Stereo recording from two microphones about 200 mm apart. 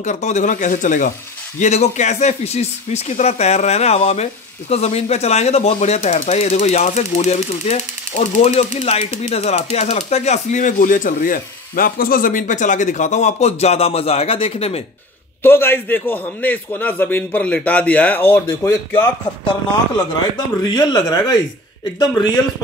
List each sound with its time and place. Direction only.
0.0 s speech: 35° left (ahead or behind)
15.4 s a man's voice: 10° left (ahead or behind)
20.3 s speech: 20° left (ahead or behind)